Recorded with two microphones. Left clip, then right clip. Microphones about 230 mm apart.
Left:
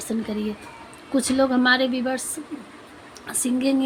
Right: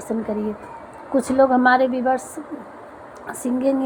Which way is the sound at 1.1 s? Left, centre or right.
Left.